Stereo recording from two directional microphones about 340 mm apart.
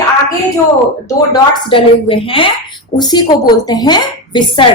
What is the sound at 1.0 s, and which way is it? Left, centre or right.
A woman's voice, centre.